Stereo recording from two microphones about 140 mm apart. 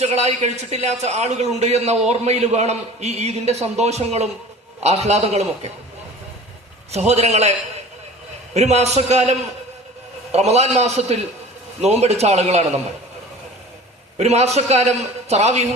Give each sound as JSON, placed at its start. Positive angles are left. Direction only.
{"t": 0.0, "sound": "a man's voice", "side_deg": -50}
{"t": 6.9, "sound": "a man's voice", "side_deg": -50}
{"t": 8.5, "sound": "a man's voice", "side_deg": -50}
{"t": 14.2, "sound": "a man's voice", "side_deg": -50}